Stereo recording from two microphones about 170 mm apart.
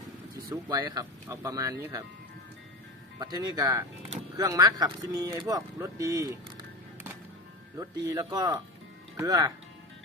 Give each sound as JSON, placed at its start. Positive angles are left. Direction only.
{"t": 0.5, "sound": "speech", "side_deg": -25}
{"t": 3.2, "sound": "speech", "side_deg": -25}
{"t": 7.8, "sound": "speech", "side_deg": -20}